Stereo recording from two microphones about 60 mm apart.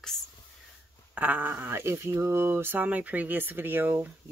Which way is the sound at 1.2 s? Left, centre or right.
Right.